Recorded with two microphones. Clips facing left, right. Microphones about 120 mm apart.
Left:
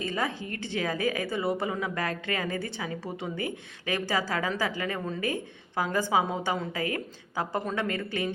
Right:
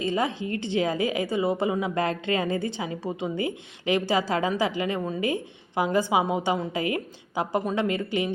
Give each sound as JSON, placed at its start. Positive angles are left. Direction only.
{"t": 0.0, "sound": "a woman's voice", "side_deg": -20}